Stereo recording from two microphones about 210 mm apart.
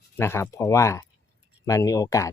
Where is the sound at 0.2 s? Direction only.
10° left (ahead or behind).